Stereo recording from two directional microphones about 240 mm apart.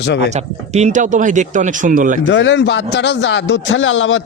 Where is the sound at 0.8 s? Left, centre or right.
Right.